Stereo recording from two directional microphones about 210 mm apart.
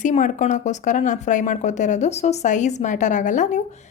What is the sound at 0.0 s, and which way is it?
Speech, 35° left (ahead or behind).